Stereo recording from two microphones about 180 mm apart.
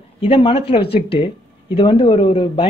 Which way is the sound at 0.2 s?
30° left (ahead or behind).